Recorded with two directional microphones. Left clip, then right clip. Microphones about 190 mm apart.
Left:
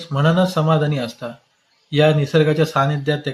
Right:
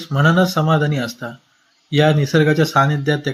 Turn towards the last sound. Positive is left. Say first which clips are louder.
# right 2 dB
turn(degrees=-15)  # may be behind; listen again after turning